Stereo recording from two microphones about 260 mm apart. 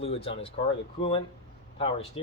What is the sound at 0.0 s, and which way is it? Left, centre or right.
Speech, left.